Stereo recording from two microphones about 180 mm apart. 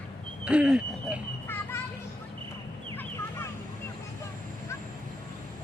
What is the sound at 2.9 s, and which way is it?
Fowl, 15° left (ahead or behind).